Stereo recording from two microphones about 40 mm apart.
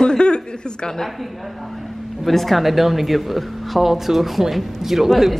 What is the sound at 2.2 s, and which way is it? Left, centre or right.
Speech, centre.